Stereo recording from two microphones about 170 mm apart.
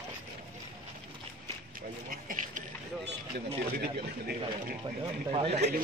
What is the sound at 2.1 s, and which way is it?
Speech, 55° right (ahead or behind).